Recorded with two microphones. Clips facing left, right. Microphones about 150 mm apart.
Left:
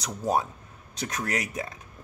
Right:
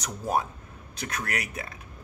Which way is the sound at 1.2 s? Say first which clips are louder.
Left 4 dB; 20° left (ahead or behind).